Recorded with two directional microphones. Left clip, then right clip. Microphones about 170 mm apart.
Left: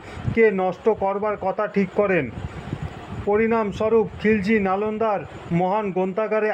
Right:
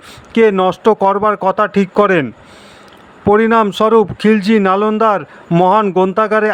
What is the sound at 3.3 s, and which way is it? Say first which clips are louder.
Speech: right 10 dB; 25° right (ahead or behind).